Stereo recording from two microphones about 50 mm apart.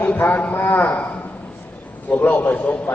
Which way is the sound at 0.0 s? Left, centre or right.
Left.